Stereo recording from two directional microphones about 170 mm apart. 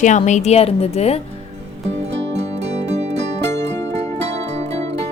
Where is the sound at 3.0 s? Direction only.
90° right.